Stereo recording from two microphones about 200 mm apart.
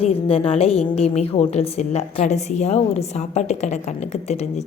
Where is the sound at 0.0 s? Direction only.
30° left (ahead or behind).